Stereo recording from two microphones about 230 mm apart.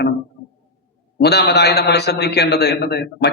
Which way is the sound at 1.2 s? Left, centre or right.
Left.